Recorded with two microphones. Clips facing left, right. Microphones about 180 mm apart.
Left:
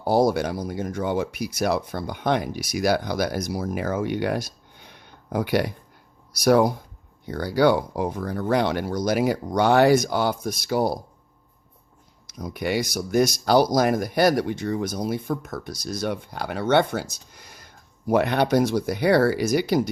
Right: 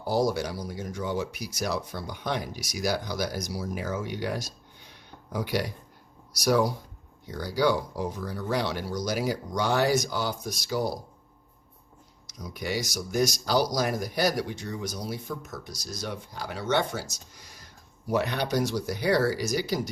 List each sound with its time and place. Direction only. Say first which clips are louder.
0.0 s speech: left 6 dB; 55° left (ahead or behind)
12.3 s speech: left 6 dB; 55° left (ahead or behind)